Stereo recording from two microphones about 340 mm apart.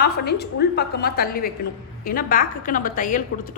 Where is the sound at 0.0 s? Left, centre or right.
Left.